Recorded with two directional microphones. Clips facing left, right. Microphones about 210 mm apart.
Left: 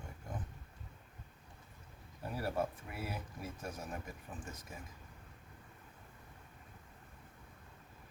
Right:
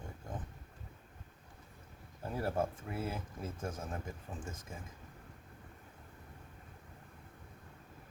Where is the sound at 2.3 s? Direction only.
25° right (ahead or behind).